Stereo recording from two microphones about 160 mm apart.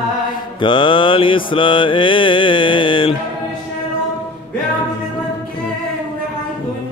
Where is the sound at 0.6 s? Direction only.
30° left (ahead or behind).